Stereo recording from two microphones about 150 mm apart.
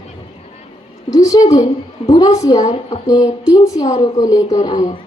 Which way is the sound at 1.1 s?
25° left (ahead or behind).